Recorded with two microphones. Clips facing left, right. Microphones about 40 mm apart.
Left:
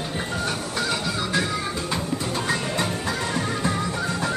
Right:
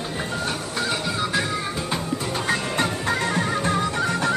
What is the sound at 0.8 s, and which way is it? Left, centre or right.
Music, centre.